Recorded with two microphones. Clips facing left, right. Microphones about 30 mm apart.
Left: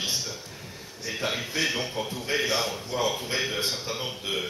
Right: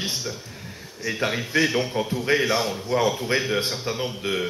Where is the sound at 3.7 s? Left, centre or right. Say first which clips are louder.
Right 4 dB; centre.